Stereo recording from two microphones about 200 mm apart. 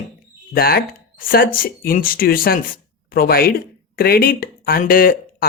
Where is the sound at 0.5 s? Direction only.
50° left (ahead or behind).